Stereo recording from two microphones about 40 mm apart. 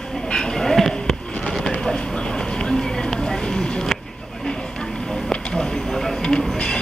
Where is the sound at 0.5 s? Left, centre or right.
Centre.